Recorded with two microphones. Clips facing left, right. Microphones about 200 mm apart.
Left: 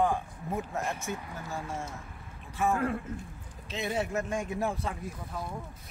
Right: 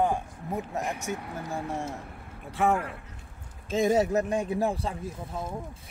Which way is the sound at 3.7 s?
40° right (ahead or behind).